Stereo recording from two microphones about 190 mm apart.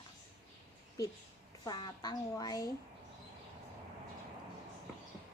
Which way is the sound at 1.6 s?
20° left (ahead or behind).